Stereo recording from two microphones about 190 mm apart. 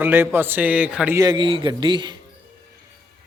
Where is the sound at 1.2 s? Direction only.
25° right (ahead or behind).